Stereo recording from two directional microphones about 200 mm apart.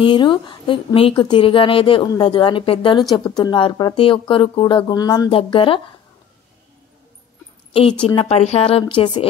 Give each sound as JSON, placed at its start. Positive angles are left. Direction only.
{"t": 0.0, "sound": "a woman's voice", "side_deg": 25}
{"t": 8.0, "sound": "a woman's voice", "side_deg": 25}